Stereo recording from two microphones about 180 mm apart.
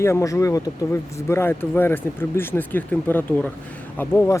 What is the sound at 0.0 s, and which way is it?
Speech, 15° left (ahead or behind).